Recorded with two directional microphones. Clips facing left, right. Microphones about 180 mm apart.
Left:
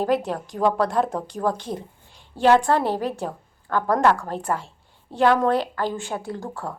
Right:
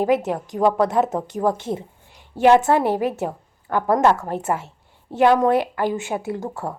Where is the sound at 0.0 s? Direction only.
20° right (ahead or behind).